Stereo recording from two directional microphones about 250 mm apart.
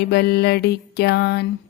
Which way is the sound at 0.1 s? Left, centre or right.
Left.